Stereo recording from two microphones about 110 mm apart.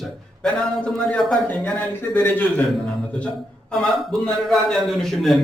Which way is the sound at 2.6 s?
5° left (ahead or behind).